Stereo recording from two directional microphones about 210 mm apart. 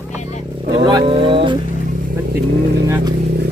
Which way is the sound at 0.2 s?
30° left (ahead or behind).